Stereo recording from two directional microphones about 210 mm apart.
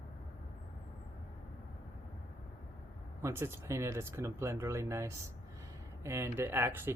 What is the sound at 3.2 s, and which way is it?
Speech, 10° right (ahead or behind).